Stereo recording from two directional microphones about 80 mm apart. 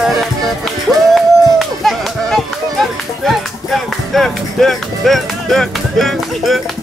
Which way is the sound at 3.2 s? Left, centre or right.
Centre.